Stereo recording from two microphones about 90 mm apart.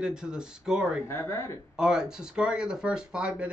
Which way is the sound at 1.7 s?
10° right (ahead or behind).